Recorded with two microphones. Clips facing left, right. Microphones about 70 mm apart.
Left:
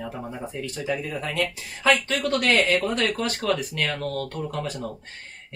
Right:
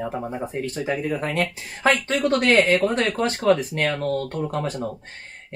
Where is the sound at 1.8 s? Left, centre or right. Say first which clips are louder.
Right 2 dB; right.